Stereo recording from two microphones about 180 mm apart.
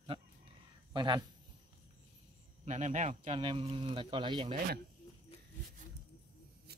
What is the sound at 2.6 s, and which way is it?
Speech, 40° right (ahead or behind).